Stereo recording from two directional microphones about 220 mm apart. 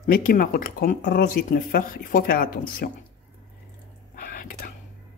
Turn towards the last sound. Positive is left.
turn(degrees=40)  # may be behind; listen again after turning